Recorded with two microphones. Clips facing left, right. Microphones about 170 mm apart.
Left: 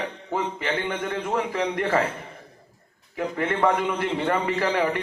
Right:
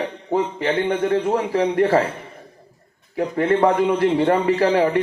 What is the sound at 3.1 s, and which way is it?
Speech, 35° right (ahead or behind).